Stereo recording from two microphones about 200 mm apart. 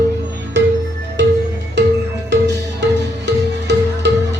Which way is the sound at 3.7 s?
60° right (ahead or behind).